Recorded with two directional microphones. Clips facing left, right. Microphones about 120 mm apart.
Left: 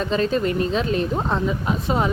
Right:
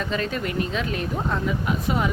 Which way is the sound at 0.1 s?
30° left (ahead or behind).